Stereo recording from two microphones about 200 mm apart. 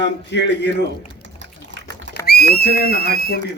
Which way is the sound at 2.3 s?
50° left (ahead or behind).